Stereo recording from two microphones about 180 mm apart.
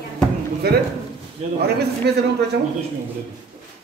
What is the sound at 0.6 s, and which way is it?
Speech, 60° right (ahead or behind).